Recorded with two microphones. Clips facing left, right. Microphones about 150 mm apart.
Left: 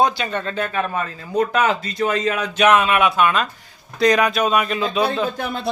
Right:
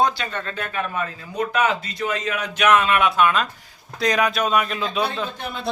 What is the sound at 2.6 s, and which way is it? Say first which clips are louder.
Speech: left 2 dB; 15° left (ahead or behind).